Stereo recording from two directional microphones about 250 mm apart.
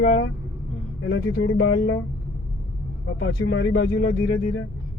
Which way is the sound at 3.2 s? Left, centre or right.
Left.